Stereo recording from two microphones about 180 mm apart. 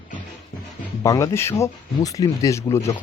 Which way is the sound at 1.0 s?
15° left (ahead or behind).